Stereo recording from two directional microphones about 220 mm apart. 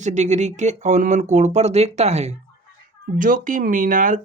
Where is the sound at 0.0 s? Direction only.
30° right (ahead or behind).